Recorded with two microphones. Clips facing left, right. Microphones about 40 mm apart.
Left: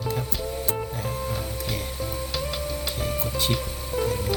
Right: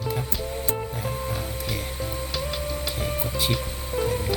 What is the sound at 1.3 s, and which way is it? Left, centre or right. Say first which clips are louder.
Music: even; centre.